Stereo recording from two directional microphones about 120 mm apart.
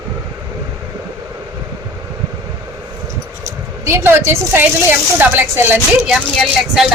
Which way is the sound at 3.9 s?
20° right (ahead or behind).